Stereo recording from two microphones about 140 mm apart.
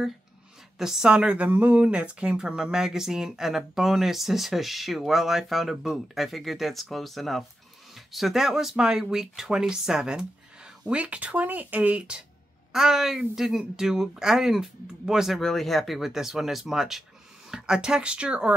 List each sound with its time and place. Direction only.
0.7 s speech: 5° right (ahead or behind)